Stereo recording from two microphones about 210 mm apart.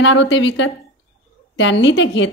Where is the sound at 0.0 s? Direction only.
60° left (ahead or behind).